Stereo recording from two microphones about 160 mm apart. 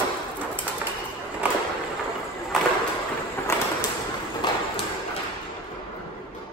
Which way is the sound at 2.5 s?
Centre (ahead or behind).